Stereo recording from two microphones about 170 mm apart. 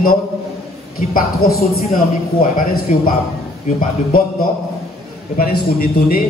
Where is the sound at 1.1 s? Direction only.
60° left (ahead or behind).